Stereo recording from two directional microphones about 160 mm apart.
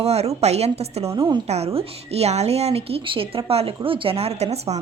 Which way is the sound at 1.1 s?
25° right (ahead or behind).